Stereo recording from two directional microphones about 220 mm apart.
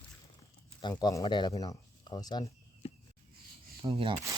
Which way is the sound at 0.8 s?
20° left (ahead or behind).